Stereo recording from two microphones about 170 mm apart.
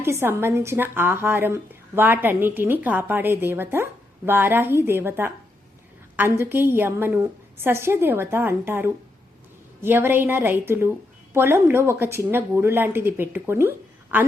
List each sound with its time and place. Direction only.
0.0 s speech: 15° right (ahead or behind)